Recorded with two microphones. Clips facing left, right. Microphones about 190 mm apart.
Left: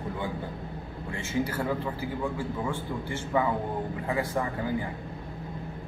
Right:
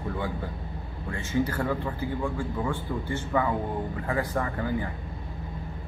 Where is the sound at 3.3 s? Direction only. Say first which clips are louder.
Even; 20° left (ahead or behind).